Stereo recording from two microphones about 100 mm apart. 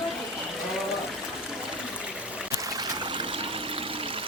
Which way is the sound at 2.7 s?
50° right (ahead or behind).